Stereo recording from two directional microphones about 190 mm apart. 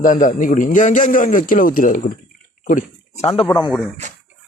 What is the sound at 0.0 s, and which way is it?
A man's voice, 45° left (ahead or behind).